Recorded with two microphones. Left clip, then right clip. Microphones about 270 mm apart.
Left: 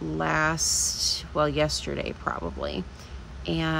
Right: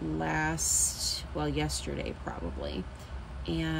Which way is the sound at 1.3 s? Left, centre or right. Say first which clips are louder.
Left 9 dB; centre.